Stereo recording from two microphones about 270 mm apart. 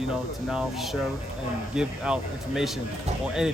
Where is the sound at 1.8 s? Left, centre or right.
Centre.